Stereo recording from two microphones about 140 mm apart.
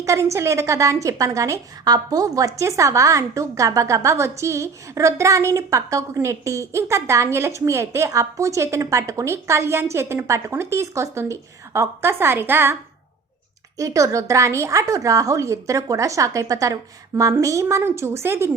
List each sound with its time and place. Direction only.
0.0 s a woman's voice: 20° right (ahead or behind)
13.7 s a woman's voice: 25° right (ahead or behind)